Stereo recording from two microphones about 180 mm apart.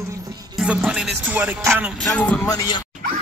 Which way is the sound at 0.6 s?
5° right (ahead or behind).